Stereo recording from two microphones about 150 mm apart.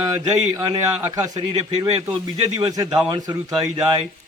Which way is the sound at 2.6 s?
25° right (ahead or behind).